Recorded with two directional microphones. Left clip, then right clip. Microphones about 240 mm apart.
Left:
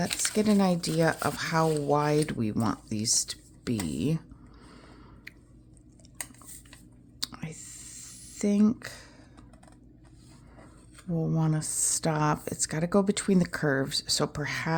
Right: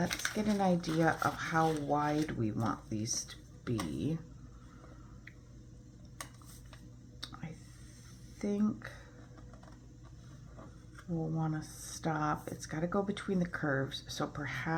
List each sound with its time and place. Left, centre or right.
0.3 s speech: left
7.2 s clicking: left
8.0 s a sound: left
11.1 s speech: left